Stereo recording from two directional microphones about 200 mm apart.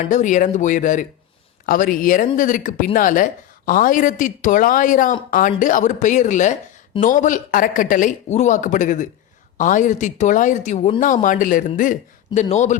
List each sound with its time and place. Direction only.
0.0 s speech: 40° left (ahead or behind)